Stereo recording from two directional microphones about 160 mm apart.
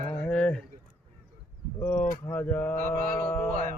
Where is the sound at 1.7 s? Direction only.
10° left (ahead or behind).